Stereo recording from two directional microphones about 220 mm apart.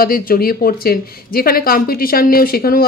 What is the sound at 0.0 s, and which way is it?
Speech, 40° left (ahead or behind).